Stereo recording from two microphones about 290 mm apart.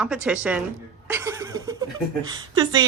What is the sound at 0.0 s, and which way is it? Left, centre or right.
Speech, centre.